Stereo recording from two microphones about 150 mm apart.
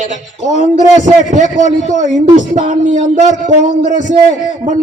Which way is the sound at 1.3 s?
55° right (ahead or behind).